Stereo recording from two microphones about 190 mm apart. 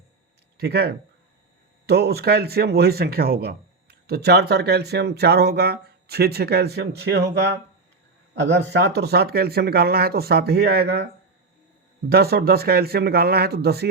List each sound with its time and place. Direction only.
0.5 s speech: 60° right (ahead or behind)
8.4 s speech: 65° right (ahead or behind)
12.0 s speech: 55° right (ahead or behind)